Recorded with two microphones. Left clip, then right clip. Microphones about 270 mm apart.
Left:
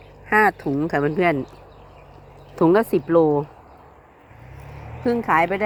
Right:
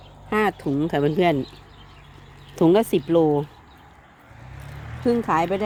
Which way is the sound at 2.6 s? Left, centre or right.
Centre.